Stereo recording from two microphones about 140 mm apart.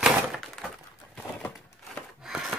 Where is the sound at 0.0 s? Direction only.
Centre (ahead or behind).